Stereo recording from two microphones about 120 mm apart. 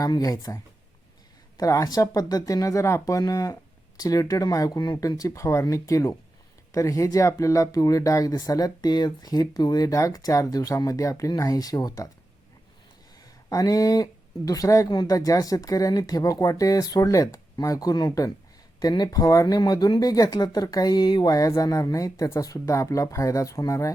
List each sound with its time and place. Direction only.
0.0 s speech: 30° left (ahead or behind)
13.5 s speech: 30° left (ahead or behind)